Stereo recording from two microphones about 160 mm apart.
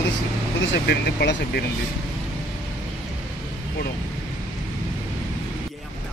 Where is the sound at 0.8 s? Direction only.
80° left.